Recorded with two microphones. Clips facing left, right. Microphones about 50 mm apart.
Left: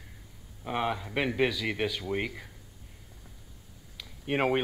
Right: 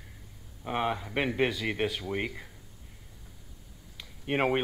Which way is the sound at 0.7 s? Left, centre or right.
Centre.